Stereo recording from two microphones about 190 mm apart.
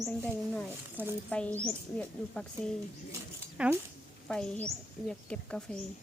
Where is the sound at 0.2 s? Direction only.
10° left (ahead or behind).